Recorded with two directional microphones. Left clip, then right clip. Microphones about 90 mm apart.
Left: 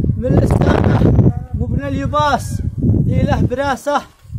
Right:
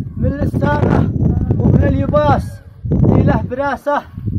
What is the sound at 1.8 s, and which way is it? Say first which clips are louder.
Speech: even; 20° left (ahead or behind).